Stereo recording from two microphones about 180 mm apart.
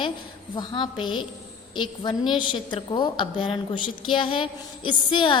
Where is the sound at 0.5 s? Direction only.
25° left (ahead or behind).